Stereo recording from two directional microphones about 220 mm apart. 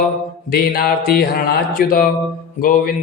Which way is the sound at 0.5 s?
45° left (ahead or behind).